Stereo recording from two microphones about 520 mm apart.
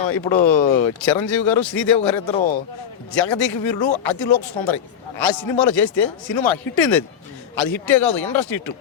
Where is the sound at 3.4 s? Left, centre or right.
Left.